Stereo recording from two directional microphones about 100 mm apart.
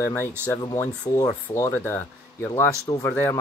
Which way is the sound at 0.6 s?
45° left (ahead or behind).